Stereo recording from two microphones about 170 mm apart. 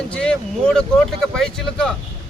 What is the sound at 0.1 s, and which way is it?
Speech, 5° left (ahead or behind).